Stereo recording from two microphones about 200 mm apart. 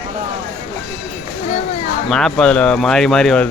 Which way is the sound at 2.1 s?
5° left (ahead or behind).